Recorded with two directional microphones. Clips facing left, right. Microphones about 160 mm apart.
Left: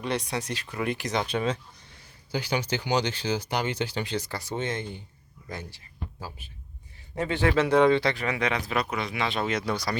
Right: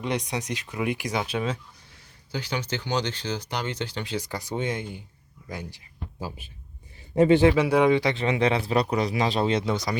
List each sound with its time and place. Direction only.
0.0 s speech: 15° right (ahead or behind)
2.3 s speech: 10° left (ahead or behind)
4.1 s speech: 15° right (ahead or behind)
8.2 s speech: 30° right (ahead or behind)